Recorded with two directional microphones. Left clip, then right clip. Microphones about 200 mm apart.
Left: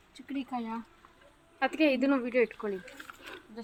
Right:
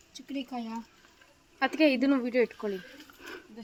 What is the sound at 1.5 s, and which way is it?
A woman's voice, 65° right (ahead or behind).